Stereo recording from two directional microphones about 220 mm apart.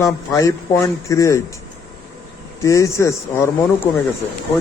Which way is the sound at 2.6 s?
15° left (ahead or behind).